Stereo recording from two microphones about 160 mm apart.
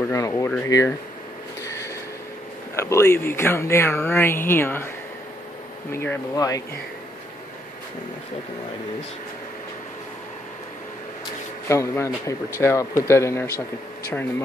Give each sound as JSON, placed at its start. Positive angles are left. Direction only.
{"t": 0.1, "sound": "speech", "side_deg": 20}
{"t": 1.6, "sound": "a sound", "side_deg": 20}
{"t": 2.7, "sound": "speech", "side_deg": 15}
{"t": 5.9, "sound": "speech", "side_deg": 15}
{"t": 11.6, "sound": "speech", "side_deg": 20}